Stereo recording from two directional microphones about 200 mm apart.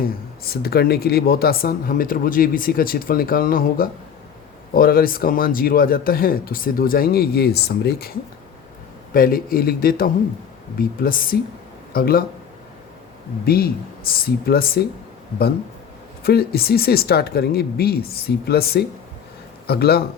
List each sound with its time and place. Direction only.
0.0 s speech: 50° left (ahead or behind)
9.1 s speech: 45° left (ahead or behind)
13.4 s speech: 50° left (ahead or behind)
16.2 s speech: 50° left (ahead or behind)